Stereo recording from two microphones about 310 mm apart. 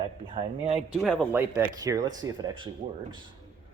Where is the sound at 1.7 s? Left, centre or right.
Centre.